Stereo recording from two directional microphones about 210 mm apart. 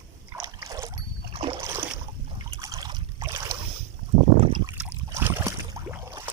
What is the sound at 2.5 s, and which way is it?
Boat, 15° right (ahead or behind).